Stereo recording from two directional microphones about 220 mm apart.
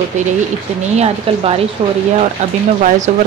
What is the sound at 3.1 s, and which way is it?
Speech, 35° right (ahead or behind).